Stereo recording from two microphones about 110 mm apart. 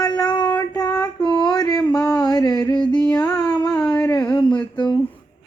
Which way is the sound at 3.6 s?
40° left (ahead or behind).